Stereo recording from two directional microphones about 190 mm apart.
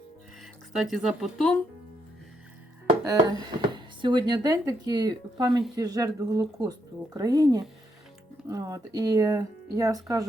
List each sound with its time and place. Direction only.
0.7 s speech: 5° right (ahead or behind)
3.1 s speech: 20° right (ahead or behind)